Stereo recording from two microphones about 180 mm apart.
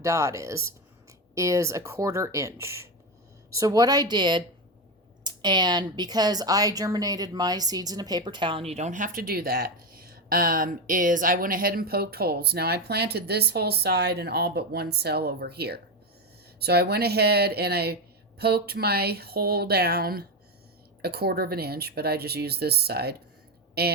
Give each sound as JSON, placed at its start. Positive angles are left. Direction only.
{"t": 0.0, "sound": "speech", "side_deg": -15}